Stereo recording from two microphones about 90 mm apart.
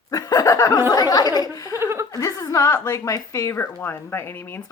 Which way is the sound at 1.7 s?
30° right (ahead or behind).